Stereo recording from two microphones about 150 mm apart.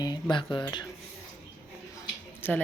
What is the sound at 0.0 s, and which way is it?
Speech, 30° left (ahead or behind).